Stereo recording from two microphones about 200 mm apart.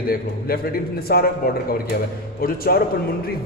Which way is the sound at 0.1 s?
50° left (ahead or behind).